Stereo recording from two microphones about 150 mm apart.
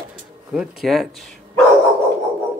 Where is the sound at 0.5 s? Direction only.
Centre (ahead or behind).